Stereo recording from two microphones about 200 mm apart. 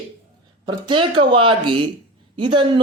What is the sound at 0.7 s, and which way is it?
Speech, 25° right (ahead or behind).